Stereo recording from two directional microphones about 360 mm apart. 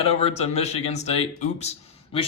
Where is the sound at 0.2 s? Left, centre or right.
Centre.